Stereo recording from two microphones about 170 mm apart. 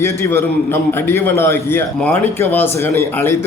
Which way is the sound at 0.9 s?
15° left (ahead or behind).